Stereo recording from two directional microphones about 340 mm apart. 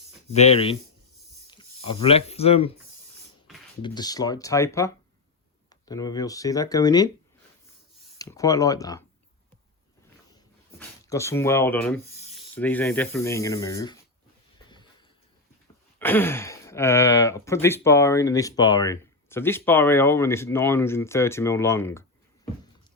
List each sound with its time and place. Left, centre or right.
0.3 s speech: centre
3.8 s speech: centre
8.2 s speech: centre
10.8 s speech: centre
16.0 s speech: centre